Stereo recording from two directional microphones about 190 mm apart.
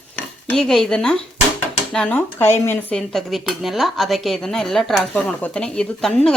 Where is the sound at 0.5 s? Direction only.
Centre (ahead or behind).